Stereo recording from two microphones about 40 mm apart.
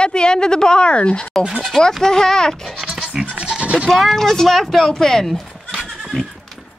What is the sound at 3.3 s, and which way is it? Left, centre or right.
Goat, right.